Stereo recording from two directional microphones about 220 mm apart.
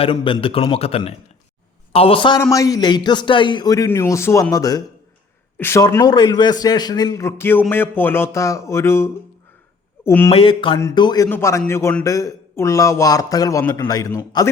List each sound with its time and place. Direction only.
0.0 s a man's voice: 25° left (ahead or behind)
10.3 s speech: 25° left (ahead or behind)